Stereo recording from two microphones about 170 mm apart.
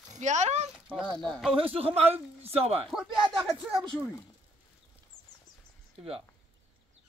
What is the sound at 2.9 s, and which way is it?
Speech, centre (ahead or behind).